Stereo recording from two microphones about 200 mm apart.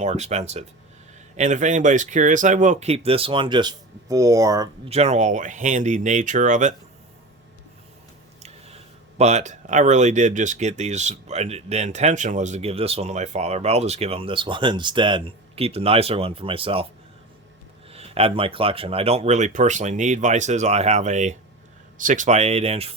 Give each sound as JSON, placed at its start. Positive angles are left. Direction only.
{"t": 0.0, "sound": "speech", "side_deg": -35}
{"t": 4.9, "sound": "speech", "side_deg": -35}
{"t": 8.4, "sound": "speech", "side_deg": -35}
{"t": 17.9, "sound": "speech", "side_deg": -30}